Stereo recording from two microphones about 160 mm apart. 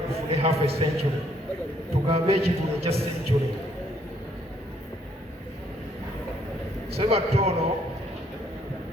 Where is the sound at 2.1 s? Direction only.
40° right (ahead or behind).